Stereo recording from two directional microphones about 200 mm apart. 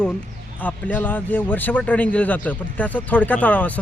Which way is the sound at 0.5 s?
10° left (ahead or behind).